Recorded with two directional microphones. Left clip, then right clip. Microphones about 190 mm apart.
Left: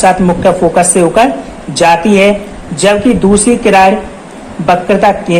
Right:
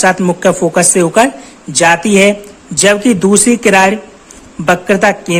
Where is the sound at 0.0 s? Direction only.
50° right (ahead or behind).